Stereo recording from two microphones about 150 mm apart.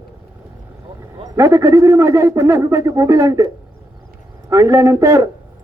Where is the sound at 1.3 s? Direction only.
20° right (ahead or behind).